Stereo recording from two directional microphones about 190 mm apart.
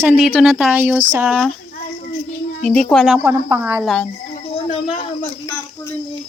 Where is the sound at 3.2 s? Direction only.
15° right (ahead or behind).